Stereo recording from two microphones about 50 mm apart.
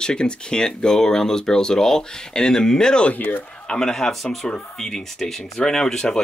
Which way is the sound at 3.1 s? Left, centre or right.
Left.